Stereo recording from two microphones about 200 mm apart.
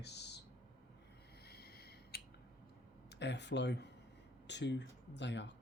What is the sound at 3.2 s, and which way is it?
Speech, 60° left (ahead or behind).